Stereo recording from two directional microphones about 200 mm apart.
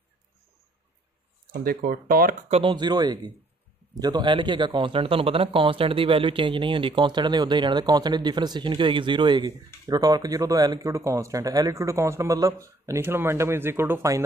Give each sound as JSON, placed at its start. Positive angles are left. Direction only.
{"t": 1.5, "sound": "speech", "side_deg": -50}
{"t": 2.5, "sound": "a man's voice", "side_deg": -25}